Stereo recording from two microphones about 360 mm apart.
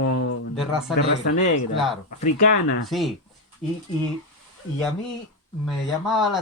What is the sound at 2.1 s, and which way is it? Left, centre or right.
Speech, centre.